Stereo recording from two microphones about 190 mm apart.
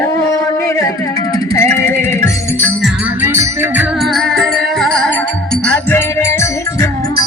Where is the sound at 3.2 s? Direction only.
10° right (ahead or behind).